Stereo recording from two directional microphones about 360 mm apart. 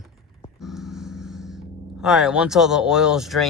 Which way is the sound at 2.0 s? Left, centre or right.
Centre.